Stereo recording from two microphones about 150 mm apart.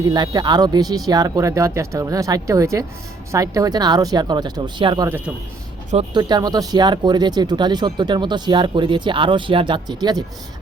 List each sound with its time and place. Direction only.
0.1 s speech: 30° right (ahead or behind)
5.0 s speech: 10° right (ahead or behind)
6.1 s speech: 30° right (ahead or behind)